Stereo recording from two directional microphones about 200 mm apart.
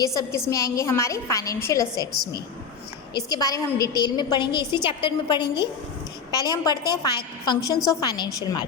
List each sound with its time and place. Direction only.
0.0 s a woman's voice: 15° left (ahead or behind)